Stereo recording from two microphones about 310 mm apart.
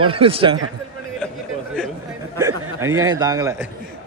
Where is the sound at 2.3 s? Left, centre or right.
Centre.